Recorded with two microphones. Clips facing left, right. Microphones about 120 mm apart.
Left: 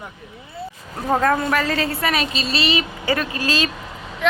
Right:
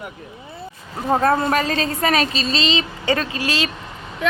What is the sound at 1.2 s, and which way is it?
Speech, 25° right (ahead or behind).